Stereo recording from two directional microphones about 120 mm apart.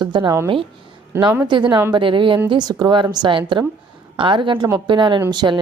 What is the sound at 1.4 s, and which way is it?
A woman's voice, 40° right (ahead or behind).